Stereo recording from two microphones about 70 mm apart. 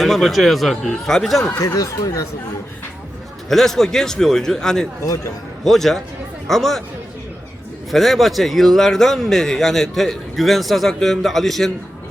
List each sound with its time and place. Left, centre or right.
0.0 s a man's voice: centre
1.5 s speech: left
3.5 s a man's voice: centre
5.0 s speech: left
5.6 s a man's voice: centre
7.9 s a man's voice: centre